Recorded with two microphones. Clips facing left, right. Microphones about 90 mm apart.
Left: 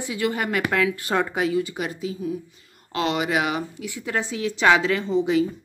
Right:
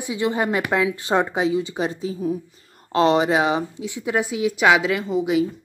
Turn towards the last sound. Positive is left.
turn(degrees=-10)  # may be behind; listen again after turning